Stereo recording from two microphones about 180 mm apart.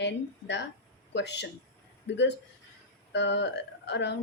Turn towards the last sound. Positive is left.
turn(degrees=75)  # may be behind; listen again after turning